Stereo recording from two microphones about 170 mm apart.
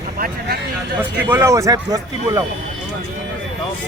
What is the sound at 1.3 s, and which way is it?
Speech, 15° right (ahead or behind).